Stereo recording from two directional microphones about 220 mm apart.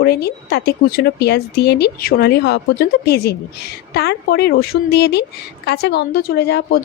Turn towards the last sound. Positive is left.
turn(degrees=45)  # may be behind; listen again after turning